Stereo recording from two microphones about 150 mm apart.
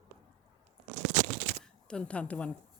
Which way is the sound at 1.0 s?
55° right (ahead or behind).